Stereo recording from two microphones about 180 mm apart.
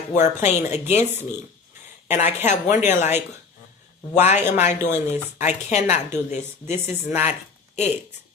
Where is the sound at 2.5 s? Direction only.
40° left (ahead or behind).